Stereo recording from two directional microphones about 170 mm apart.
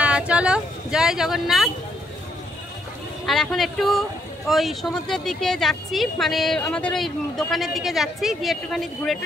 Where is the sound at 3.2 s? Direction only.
Centre (ahead or behind).